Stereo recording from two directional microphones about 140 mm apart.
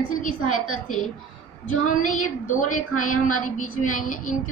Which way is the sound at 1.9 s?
70° left (ahead or behind).